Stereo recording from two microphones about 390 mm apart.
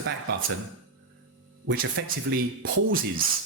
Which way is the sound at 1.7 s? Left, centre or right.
Right.